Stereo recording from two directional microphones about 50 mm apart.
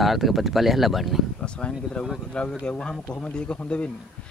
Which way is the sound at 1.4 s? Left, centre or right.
Left.